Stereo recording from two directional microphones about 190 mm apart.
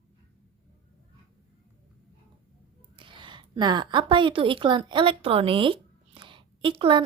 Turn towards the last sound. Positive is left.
turn(degrees=-30)  # may be behind; listen again after turning